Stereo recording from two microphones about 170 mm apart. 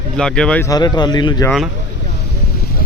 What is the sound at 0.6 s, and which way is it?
Speech, 25° left (ahead or behind).